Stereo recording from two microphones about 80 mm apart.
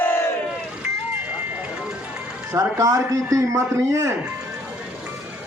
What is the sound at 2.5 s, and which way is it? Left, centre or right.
A man's voice, right.